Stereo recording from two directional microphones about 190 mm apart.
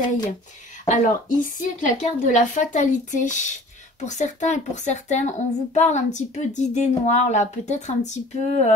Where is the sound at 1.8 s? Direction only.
40° left (ahead or behind).